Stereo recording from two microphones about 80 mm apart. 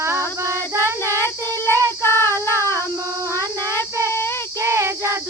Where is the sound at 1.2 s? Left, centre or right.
Left.